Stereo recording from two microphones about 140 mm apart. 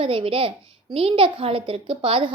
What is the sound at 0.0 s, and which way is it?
A woman's voice, 40° right (ahead or behind).